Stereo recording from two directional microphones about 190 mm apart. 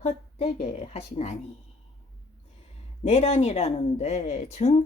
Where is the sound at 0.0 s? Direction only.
35° left (ahead or behind).